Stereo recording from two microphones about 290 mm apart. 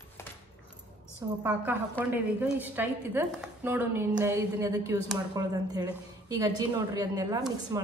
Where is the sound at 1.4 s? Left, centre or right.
Centre.